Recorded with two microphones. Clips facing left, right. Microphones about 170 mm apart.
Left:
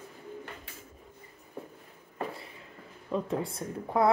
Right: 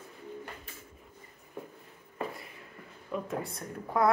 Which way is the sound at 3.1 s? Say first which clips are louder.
Left 4 dB; 25° left (ahead or behind).